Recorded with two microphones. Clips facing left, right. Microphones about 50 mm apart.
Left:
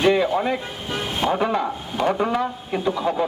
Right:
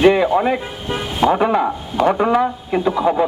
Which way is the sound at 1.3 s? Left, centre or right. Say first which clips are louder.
Right 5 dB; centre.